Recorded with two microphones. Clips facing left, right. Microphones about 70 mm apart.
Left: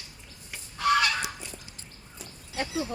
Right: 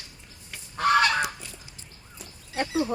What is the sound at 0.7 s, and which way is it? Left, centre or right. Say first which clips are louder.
Goose: right 3 dB; right.